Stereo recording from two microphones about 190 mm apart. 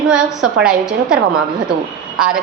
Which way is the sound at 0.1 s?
5° right (ahead or behind).